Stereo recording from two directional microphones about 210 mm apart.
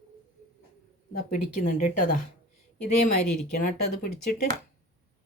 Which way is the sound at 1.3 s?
40° left (ahead or behind).